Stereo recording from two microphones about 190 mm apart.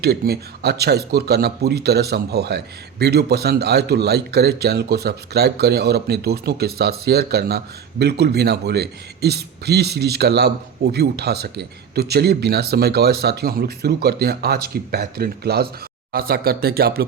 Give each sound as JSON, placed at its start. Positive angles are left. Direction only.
{"t": 0.0, "sound": "speech", "side_deg": -60}